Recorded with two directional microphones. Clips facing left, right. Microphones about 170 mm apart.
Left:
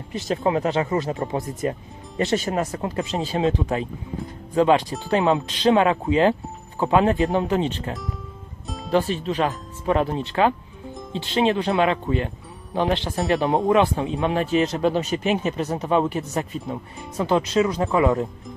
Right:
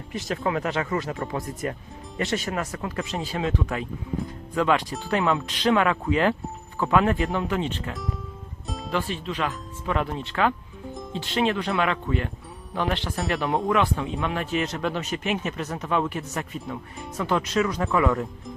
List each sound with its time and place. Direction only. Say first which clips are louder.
0.1 s speech: left 4 dB; 25° left (ahead or behind)
8.6 s music: even; centre (ahead or behind)
8.9 s speech: left 7 dB; 40° left (ahead or behind); by 18.3 s 25° left (ahead or behind)